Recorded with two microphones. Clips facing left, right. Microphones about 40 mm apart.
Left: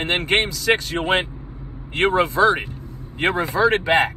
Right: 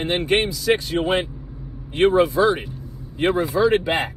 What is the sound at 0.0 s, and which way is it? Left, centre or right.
Speech, left.